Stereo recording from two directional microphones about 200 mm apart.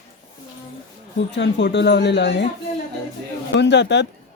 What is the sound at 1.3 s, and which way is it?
Speech, 60° left (ahead or behind).